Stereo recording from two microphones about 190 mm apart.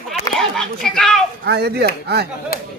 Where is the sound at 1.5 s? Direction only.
60° right (ahead or behind).